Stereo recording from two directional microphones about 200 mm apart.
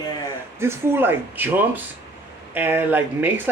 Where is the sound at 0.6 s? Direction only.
10° right (ahead or behind).